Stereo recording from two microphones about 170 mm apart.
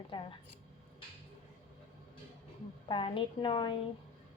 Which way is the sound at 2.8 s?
30° left (ahead or behind).